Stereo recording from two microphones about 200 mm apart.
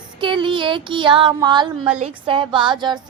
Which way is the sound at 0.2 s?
25° right (ahead or behind).